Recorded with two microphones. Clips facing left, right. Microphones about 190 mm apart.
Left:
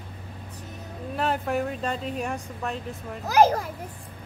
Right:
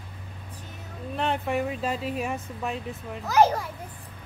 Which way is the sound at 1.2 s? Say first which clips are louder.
Left 1 dB; centre (ahead or behind).